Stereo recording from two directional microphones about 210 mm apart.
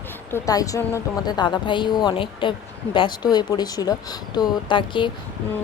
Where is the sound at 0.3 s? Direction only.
15° left (ahead or behind).